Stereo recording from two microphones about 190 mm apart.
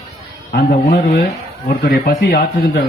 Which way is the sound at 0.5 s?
55° left (ahead or behind).